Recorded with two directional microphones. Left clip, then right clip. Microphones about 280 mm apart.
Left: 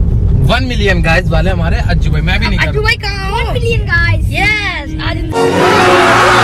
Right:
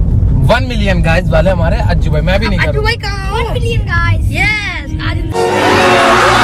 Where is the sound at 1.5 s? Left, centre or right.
Centre.